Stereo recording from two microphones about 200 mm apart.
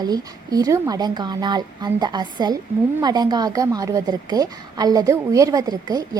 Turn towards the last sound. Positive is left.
turn(degrees=-20)  # may be behind; listen again after turning